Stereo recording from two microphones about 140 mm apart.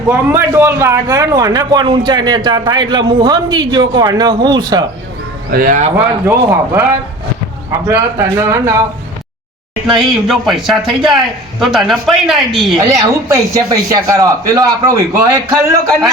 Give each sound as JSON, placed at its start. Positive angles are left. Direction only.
{"t": 0.1, "sound": "a man's voice", "side_deg": -15}
{"t": 5.5, "sound": "speech", "side_deg": -90}
{"t": 6.2, "sound": "a man's voice", "side_deg": -15}
{"t": 7.9, "sound": "a man's voice", "side_deg": -20}
{"t": 10.0, "sound": "speech", "side_deg": 0}
{"t": 12.9, "sound": "a man's voice", "side_deg": -25}